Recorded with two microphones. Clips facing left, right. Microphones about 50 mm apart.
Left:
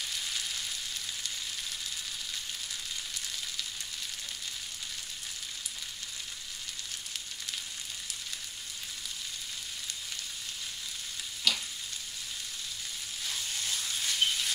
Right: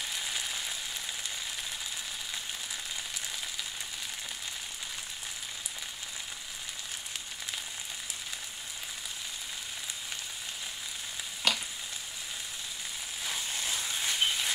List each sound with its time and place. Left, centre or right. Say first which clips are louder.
0.1 s frying: right 1 dB; centre
11.5 s frying: right 1 dB; right
13.2 s a sound: right 2 dB; right